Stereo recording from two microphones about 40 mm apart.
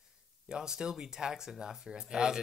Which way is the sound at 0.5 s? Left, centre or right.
Centre.